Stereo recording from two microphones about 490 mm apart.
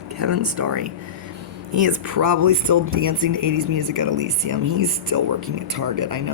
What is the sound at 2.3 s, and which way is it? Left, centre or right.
Speech, right.